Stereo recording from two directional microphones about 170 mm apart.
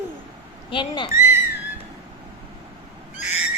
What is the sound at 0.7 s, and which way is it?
Speech, 25° left (ahead or behind).